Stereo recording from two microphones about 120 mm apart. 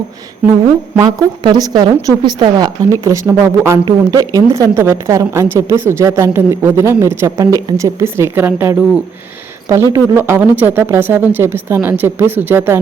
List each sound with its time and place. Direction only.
0.9 s a woman's voice: 30° right (ahead or behind)
3.0 s a woman's voice: 25° right (ahead or behind)
3.8 s a woman's voice: 30° right (ahead or behind)